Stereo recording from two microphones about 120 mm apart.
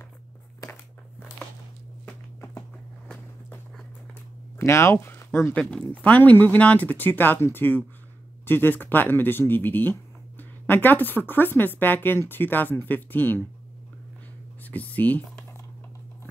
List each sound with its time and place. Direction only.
4.1 s speech: 20° left (ahead or behind)
14.6 s speech: 15° left (ahead or behind)